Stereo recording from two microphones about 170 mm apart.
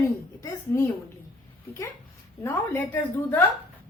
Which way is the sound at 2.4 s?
10° left (ahead or behind).